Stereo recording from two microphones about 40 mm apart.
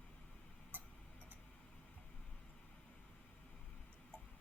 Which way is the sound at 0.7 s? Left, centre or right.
Right.